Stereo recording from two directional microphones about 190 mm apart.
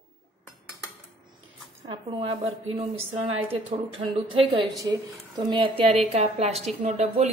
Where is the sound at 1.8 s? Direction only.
30° right (ahead or behind).